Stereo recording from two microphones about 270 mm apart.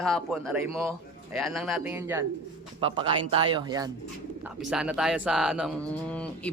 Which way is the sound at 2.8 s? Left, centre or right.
Centre.